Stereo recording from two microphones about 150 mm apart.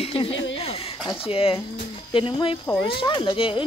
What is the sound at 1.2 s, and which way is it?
Speech, 40° left (ahead or behind).